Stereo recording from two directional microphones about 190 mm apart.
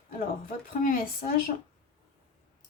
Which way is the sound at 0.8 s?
45° left (ahead or behind).